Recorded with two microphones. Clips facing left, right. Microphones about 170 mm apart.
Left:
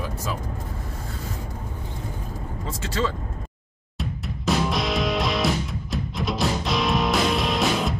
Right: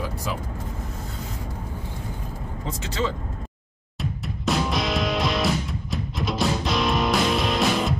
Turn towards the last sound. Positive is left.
turn(degrees=0)  # may be behind; listen again after turning